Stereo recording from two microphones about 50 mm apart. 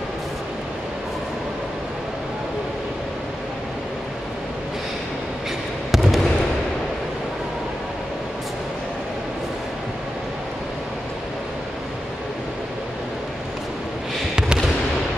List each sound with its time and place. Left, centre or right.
5.9 s fireworks: centre